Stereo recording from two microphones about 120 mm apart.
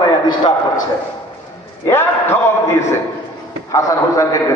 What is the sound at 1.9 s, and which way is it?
Speech, 20° left (ahead or behind).